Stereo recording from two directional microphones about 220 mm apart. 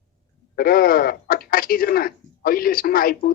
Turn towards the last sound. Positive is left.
turn(degrees=40)  # may be behind; listen again after turning